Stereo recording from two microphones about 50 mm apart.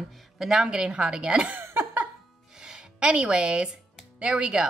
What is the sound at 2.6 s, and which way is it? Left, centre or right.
Music, centre.